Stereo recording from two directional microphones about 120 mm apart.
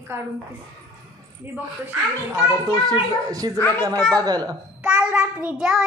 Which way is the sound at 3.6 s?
20° left (ahead or behind).